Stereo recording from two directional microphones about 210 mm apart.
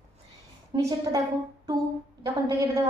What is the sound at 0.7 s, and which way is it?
Speech, 25° right (ahead or behind).